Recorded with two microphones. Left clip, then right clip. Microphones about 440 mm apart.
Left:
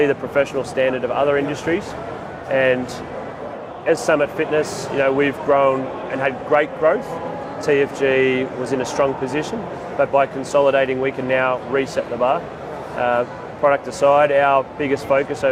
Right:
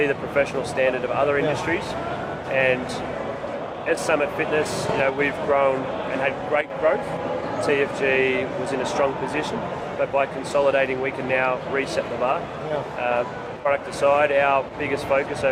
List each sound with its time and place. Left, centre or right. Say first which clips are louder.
0.0 s speech: left 4 dB; left
3.8 s speech: left 5 dB; left
13.7 s speech: left 5 dB; left